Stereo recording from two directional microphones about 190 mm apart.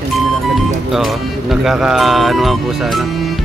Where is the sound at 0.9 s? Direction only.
Centre (ahead or behind).